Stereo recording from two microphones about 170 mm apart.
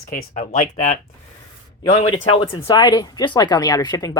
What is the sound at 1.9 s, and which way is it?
Speech, 30° left (ahead or behind).